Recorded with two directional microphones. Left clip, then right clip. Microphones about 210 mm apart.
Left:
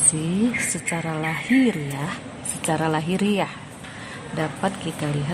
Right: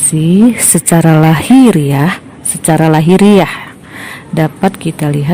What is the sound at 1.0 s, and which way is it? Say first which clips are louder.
Speech: right 17 dB; 45° right (ahead or behind).